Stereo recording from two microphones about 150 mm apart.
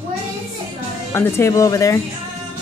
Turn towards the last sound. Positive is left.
turn(degrees=20)  # may be behind; listen again after turning